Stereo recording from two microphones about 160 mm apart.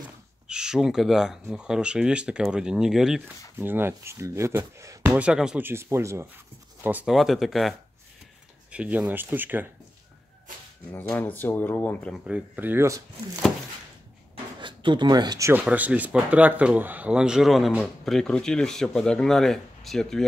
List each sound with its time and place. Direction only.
0.5 s speech: 5° right (ahead or behind)
3.5 s speech: 15° right (ahead or behind)
5.7 s speech: 15° right (ahead or behind)
7.2 s speech: centre (ahead or behind)
8.7 s speech: 10° right (ahead or behind)
10.9 s speech: 10° left (ahead or behind)
12.3 s speech: 10° right (ahead or behind)
14.3 s a sound: 30° right (ahead or behind)
15.6 s speech: 10° right (ahead or behind)